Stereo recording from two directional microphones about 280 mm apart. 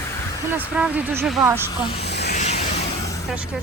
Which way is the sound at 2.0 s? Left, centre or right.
Left.